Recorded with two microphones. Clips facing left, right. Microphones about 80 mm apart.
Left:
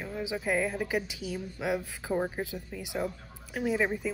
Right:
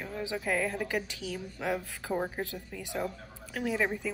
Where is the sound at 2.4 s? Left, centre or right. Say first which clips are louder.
Left 1 dB; centre.